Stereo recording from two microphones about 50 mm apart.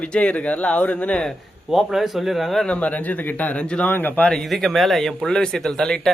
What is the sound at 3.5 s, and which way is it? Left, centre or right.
Speech, left.